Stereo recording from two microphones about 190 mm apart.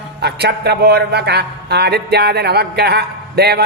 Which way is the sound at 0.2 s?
60° right (ahead or behind).